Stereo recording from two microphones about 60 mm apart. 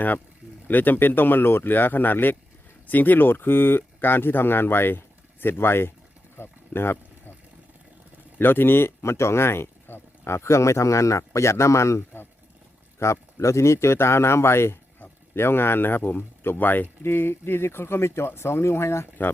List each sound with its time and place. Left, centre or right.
0.7 s speech: left
6.3 s a sound: left
8.4 s speech: left